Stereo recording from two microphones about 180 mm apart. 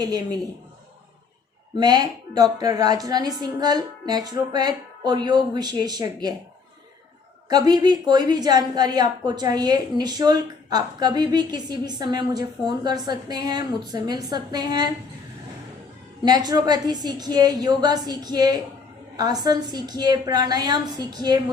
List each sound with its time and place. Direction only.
0.0 s a woman's voice: 20° right (ahead or behind)
1.7 s a woman's voice: 25° right (ahead or behind)
7.5 s a woman's voice: 20° right (ahead or behind)
16.2 s a woman's voice: 20° right (ahead or behind)